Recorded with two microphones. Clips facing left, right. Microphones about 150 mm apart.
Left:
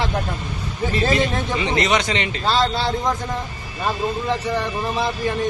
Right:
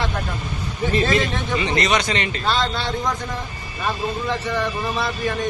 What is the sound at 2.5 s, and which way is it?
Speech, 35° left (ahead or behind).